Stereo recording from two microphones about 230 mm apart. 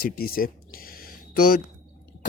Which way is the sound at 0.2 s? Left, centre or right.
Left.